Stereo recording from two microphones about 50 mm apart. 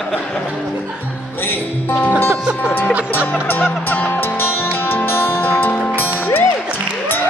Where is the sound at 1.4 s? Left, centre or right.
Left.